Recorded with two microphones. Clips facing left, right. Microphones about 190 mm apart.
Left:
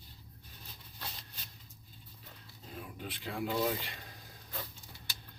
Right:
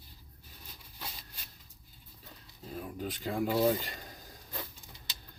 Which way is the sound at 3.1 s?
40° right (ahead or behind).